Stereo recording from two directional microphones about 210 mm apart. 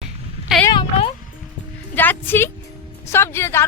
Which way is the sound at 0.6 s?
20° left (ahead or behind).